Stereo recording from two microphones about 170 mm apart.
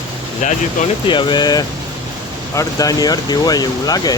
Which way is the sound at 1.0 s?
25° left (ahead or behind).